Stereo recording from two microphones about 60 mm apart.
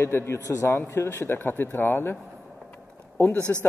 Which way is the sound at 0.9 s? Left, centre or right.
Left.